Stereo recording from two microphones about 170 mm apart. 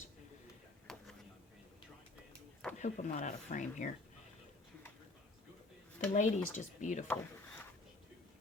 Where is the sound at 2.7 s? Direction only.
45° left (ahead or behind).